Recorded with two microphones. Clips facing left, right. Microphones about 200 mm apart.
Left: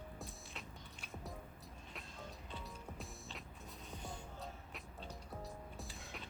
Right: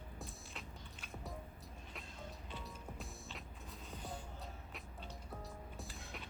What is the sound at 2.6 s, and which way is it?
Music, centre (ahead or behind).